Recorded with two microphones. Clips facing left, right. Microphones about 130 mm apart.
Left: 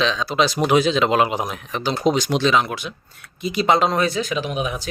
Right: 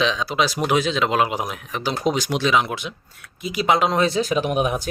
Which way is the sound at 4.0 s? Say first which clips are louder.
Right 2 dB; 30° right (ahead or behind).